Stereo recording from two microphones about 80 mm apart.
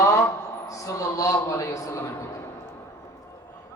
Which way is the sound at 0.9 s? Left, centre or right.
Left.